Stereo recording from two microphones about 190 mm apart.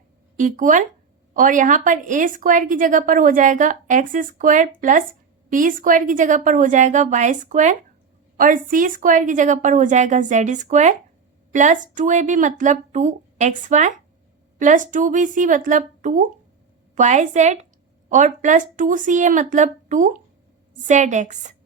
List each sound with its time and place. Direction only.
0.3 s a woman's voice: 40° right (ahead or behind)